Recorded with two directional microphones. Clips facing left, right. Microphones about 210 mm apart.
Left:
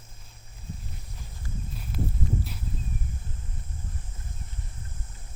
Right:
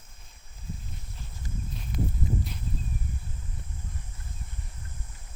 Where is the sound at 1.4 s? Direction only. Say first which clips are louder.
Even; 20° right (ahead or behind).